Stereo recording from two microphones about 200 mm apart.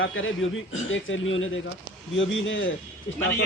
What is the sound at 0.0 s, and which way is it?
A man's voice, 75° left (ahead or behind).